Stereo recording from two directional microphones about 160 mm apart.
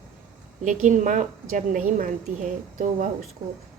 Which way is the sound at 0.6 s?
50° right (ahead or behind).